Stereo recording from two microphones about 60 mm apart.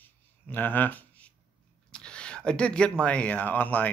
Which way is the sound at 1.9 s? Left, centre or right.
Centre.